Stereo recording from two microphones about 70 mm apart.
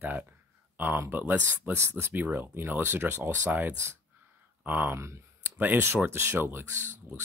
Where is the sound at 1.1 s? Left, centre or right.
Right.